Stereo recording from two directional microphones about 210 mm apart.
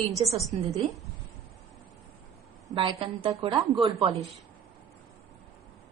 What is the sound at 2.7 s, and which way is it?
A woman's voice, 20° right (ahead or behind).